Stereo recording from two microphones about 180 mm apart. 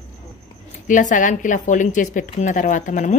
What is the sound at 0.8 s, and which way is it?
Speech, 45° left (ahead or behind).